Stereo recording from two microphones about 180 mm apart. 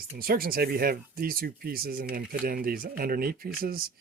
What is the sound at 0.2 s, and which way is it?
Speech, 55° right (ahead or behind).